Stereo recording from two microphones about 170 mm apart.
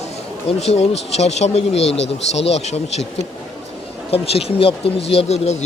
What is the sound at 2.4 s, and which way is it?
Speech, 40° left (ahead or behind).